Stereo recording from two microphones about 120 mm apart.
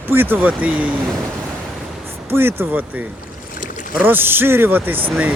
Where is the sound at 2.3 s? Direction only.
20° right (ahead or behind).